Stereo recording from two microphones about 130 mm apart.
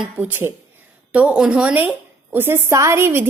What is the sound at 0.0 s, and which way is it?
A woman's voice, 15° right (ahead or behind).